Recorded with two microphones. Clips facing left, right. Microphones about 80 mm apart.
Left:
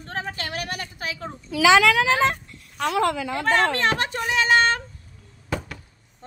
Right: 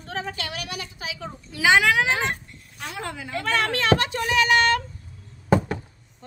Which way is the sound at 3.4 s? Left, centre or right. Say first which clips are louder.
Left 3 dB; left.